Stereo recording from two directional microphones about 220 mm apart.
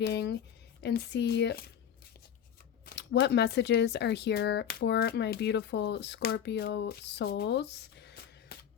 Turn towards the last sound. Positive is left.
turn(degrees=50)  # may be behind; listen again after turning